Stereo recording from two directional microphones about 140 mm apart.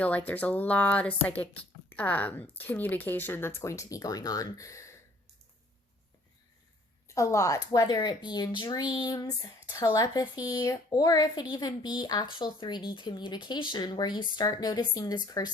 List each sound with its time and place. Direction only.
0.0 s speech: 10° left (ahead or behind)
7.1 s a woman's voice: 20° left (ahead or behind)